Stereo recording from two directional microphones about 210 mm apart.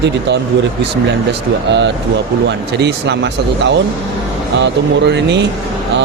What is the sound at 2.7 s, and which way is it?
Speech, 55° right (ahead or behind).